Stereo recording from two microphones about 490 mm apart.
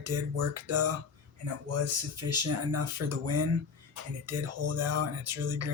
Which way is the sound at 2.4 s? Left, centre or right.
Right.